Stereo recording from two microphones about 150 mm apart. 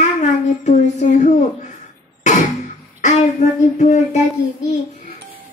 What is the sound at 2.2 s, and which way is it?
Music, 50° left (ahead or behind).